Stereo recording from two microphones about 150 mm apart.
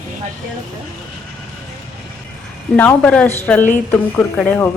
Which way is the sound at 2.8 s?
10° left (ahead or behind).